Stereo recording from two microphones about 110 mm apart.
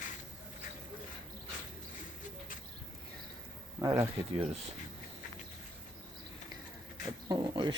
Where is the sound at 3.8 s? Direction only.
35° right (ahead or behind).